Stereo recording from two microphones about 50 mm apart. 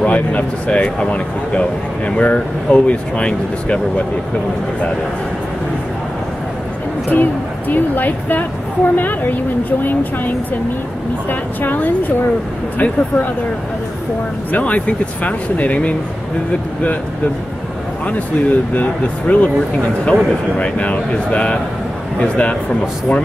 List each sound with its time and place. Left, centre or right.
0.0 s speech: left
7.1 s speech: left
14.5 s speech: left
18.0 s speech: left